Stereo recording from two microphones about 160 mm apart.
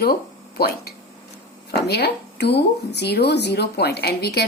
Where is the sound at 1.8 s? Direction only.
90° left.